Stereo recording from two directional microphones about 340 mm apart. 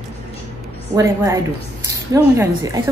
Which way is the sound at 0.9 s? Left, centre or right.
Centre.